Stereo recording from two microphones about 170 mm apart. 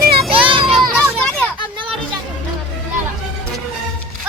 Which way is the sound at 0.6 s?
Centre (ahead or behind).